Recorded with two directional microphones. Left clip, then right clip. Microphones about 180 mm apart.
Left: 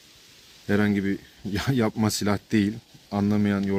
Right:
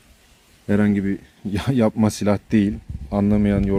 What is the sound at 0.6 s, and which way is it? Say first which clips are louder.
Speech: right 3 dB; 25° right (ahead or behind).